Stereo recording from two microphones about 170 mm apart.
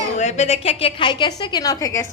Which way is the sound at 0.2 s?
40° left (ahead or behind).